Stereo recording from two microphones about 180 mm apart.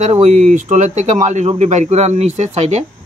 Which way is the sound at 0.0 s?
40° right (ahead or behind).